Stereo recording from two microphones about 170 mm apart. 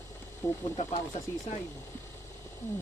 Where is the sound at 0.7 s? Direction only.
40° left (ahead or behind).